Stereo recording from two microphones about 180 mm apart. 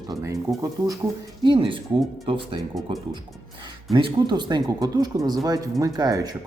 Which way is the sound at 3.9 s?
25° right (ahead or behind).